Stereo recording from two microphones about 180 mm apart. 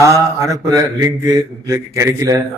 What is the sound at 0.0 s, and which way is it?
Mantra, 15° right (ahead or behind).